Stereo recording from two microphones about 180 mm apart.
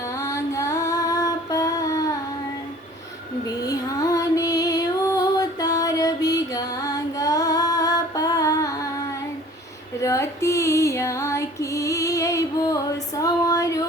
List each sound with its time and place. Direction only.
0.2 s female singing: 15° left (ahead or behind)
3.6 s music: 20° left (ahead or behind)
10.0 s female singing: 15° left (ahead or behind)